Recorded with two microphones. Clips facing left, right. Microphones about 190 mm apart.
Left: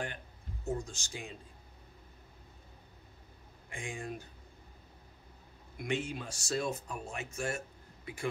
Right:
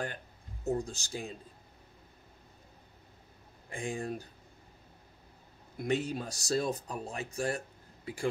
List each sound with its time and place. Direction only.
0.7 s speech: 35° right (ahead or behind)
3.7 s speech: 35° right (ahead or behind)
5.8 s speech: 40° right (ahead or behind)